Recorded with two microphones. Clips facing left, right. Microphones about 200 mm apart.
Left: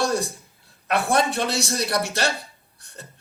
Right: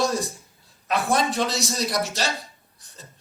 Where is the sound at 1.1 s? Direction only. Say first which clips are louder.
Left 1 dB; 60° left (ahead or behind).